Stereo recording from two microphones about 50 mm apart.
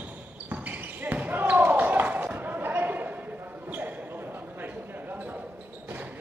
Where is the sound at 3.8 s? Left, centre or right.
Right.